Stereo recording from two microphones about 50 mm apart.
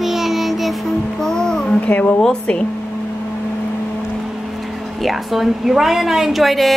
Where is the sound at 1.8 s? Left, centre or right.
Left.